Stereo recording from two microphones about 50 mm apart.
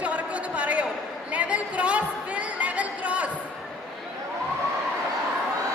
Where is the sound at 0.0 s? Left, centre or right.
Right.